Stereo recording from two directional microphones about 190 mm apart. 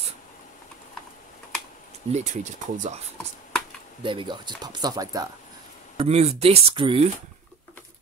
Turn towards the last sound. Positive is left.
turn(degrees=-25)  # may be behind; listen again after turning